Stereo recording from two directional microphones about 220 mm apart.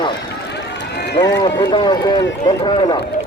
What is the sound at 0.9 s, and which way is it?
Run, 50° left (ahead or behind).